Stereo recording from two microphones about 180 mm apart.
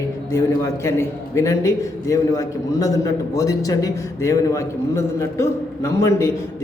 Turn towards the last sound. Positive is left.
turn(degrees=15)  # may be behind; listen again after turning